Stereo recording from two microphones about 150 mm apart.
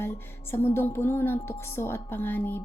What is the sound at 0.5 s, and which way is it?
A woman's voice, 15° left (ahead or behind).